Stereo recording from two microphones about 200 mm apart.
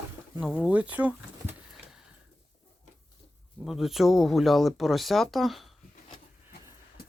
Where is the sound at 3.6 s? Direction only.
Centre (ahead or behind).